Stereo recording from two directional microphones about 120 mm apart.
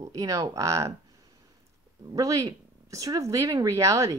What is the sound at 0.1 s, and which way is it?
Speech, 30° right (ahead or behind).